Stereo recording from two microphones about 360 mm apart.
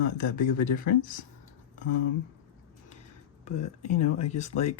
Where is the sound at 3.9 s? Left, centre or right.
Left.